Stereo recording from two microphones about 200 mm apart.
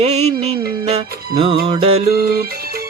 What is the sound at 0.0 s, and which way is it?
Music, 35° right (ahead or behind).